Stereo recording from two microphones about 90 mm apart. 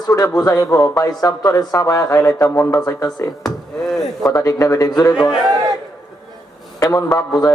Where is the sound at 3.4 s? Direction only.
5° left (ahead or behind).